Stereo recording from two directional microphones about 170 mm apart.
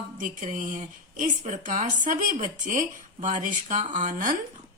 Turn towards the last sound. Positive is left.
turn(degrees=-50)  # may be behind; listen again after turning